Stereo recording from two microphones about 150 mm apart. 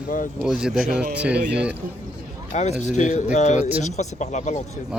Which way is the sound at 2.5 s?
50° left (ahead or behind).